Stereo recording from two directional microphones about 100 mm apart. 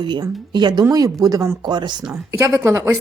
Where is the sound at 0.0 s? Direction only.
45° right (ahead or behind).